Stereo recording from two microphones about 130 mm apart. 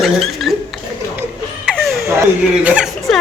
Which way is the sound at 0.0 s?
Centre (ahead or behind).